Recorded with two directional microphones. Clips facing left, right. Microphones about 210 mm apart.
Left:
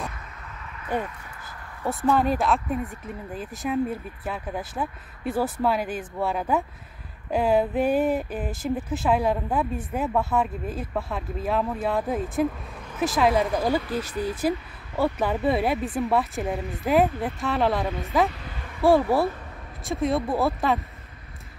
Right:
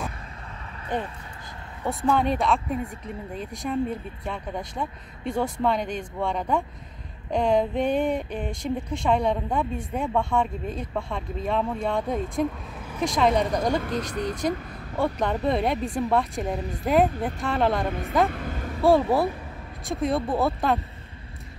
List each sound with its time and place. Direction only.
0.9 s speech: 10° left (ahead or behind)
18.3 s vehicle: 50° right (ahead or behind)
18.8 s speech: centre (ahead or behind)